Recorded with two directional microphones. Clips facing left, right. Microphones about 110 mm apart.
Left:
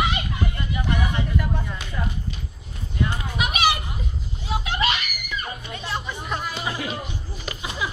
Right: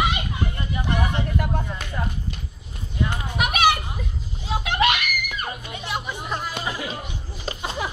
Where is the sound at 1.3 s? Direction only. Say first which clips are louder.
Right 1 dB; 50° right (ahead or behind).